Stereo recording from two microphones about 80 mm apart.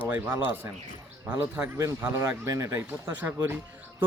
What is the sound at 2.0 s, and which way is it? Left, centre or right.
Speech, right.